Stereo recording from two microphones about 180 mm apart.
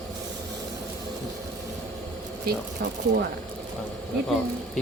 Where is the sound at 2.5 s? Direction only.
55° right (ahead or behind).